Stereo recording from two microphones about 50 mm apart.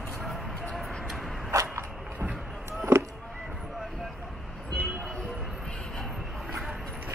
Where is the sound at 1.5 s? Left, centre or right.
Right.